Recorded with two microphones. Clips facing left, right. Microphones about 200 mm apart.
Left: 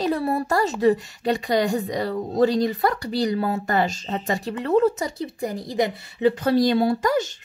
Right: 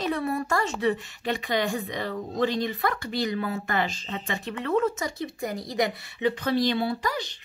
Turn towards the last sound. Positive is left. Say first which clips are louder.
# left 8 dB
turn(degrees=45)  # may be behind; listen again after turning